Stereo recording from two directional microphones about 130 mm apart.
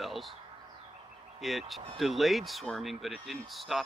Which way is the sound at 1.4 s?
Centre (ahead or behind).